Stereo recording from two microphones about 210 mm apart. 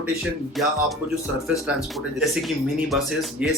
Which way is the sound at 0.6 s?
Centre (ahead or behind).